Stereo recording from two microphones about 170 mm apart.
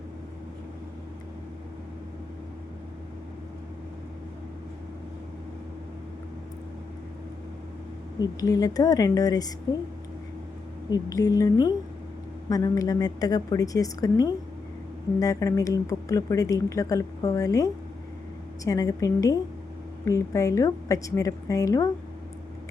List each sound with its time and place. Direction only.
8.2 s speech: 20° left (ahead or behind)
10.8 s speech: 20° left (ahead or behind)